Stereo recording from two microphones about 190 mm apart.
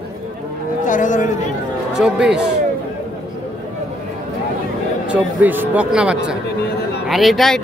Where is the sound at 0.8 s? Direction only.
40° left (ahead or behind).